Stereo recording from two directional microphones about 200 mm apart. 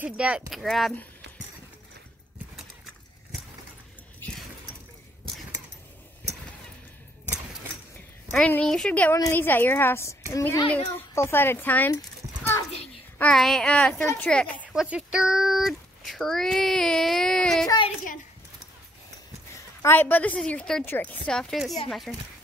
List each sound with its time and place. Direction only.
0.0 s a child's voice: 5° right (ahead or behind)
8.3 s a woman's voice: 10° left (ahead or behind)
13.2 s a child's voice: 5° left (ahead or behind)
14.6 s speech: 5° right (ahead or behind)
17.6 s a woman's voice: 25° left (ahead or behind)
19.5 s a woman's voice: 10° left (ahead or behind)